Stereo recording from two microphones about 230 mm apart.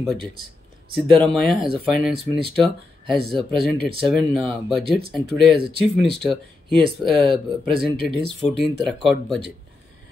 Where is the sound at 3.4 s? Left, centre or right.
Right.